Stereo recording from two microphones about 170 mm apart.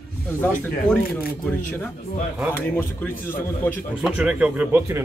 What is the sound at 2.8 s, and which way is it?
Speech, 10° left (ahead or behind).